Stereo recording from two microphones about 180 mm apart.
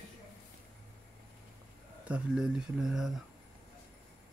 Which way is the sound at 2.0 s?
5° right (ahead or behind).